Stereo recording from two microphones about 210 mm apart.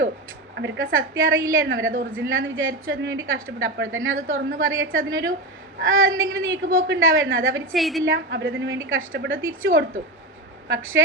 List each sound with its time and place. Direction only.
0.5 s a woman's voice: 60° right (ahead or behind)
7.7 s a woman's voice: centre (ahead or behind)
8.0 s a woman's voice: 60° right (ahead or behind)